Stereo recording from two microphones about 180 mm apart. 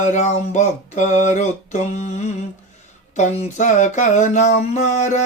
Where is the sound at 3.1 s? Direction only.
40° left (ahead or behind).